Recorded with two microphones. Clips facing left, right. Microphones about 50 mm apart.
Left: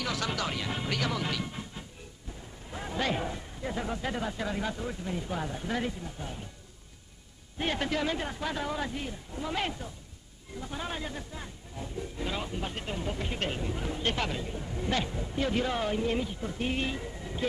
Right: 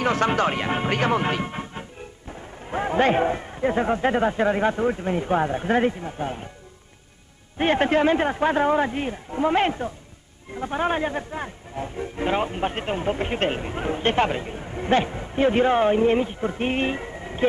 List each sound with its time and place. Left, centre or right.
0.0 s speech: right
7.5 s speech: right